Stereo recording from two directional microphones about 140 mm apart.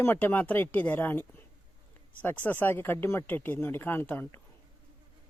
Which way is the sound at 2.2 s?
15° left (ahead or behind).